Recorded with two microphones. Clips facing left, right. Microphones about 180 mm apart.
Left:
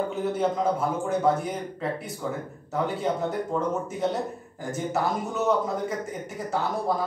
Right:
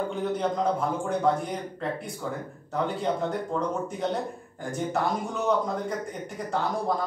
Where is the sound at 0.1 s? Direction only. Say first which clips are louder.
Left 2 dB; 5° left (ahead or behind).